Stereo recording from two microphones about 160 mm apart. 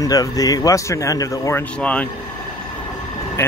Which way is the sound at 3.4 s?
15° left (ahead or behind).